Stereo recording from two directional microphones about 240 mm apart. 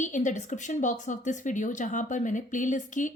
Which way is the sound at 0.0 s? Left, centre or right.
Left.